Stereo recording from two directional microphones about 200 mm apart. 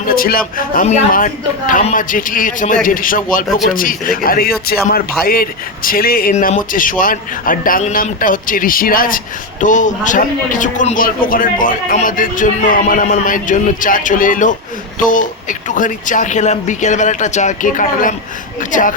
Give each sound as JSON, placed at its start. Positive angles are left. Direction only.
{"t": 0.1, "sound": "a man's voice", "side_deg": 45}